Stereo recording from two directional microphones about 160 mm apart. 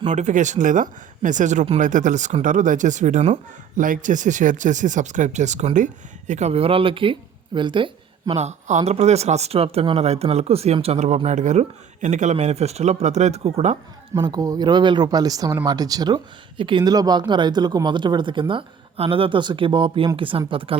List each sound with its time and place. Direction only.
0.0 s speech: 45° right (ahead or behind); by 7.9 s 30° right (ahead or behind)
8.3 s speech: 45° right (ahead or behind)
14.1 s speech: 25° right (ahead or behind)